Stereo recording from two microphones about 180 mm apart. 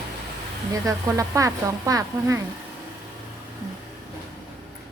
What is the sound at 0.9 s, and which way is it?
Speech, 20° right (ahead or behind).